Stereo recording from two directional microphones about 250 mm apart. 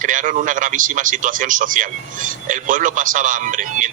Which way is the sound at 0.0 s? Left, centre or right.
Right.